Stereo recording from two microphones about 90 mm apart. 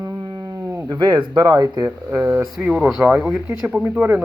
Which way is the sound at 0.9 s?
55° right (ahead or behind).